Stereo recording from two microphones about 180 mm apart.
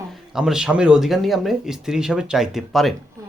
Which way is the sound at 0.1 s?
5° right (ahead or behind).